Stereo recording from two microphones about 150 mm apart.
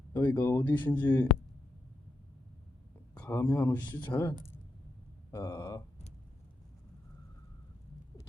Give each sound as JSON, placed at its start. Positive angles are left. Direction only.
{"t": 0.1, "sound": "speech", "side_deg": 15}
{"t": 3.2, "sound": "speech", "side_deg": 10}
{"t": 4.1, "sound": "speech", "side_deg": 20}